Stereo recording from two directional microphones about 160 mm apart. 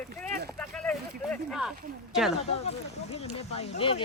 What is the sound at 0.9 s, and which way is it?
Speech, centre (ahead or behind).